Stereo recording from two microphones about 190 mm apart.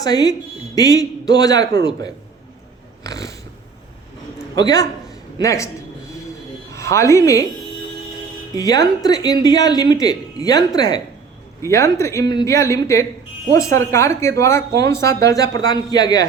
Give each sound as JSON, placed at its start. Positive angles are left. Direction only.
{"t": 0.0, "sound": "speech", "side_deg": 20}
{"t": 3.0, "sound": "speech", "side_deg": 20}
{"t": 4.5, "sound": "speech", "side_deg": 20}
{"t": 6.7, "sound": "speech", "side_deg": 15}
{"t": 8.5, "sound": "speech", "side_deg": 20}